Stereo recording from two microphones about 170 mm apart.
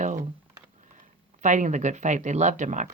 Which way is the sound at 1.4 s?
45° right (ahead or behind).